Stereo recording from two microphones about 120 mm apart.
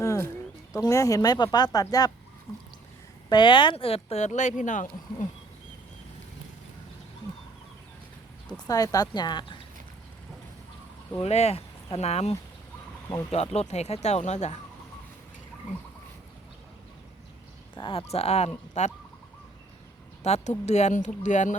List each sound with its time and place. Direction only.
0.0 s a sound: 25° left (ahead or behind)
0.7 s speech: 25° left (ahead or behind)
3.2 s speech: 40° left (ahead or behind); by 4.9 s 90° left
8.6 s speech: 30° left (ahead or behind)
11.2 s speech: 60° left (ahead or behind)
17.7 s speech: 50° left (ahead or behind); by 18.9 s 70° left (ahead or behind)
20.2 s speech: 70° left (ahead or behind); by 21.5 s 90° left